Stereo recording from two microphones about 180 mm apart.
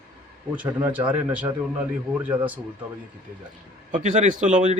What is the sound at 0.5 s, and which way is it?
Speech, 10° right (ahead or behind).